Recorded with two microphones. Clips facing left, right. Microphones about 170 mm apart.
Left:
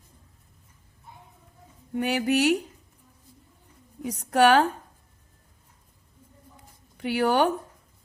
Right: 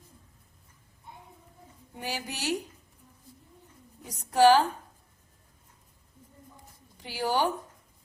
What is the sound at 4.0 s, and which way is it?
Speech, 65° left (ahead or behind).